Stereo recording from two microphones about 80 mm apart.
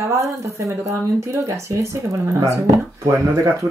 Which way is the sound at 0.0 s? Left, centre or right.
Right.